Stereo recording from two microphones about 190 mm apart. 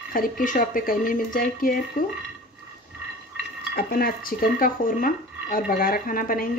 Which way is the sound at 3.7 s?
50° left (ahead or behind).